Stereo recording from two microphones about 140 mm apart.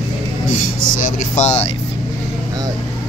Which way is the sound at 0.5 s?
65° left (ahead or behind).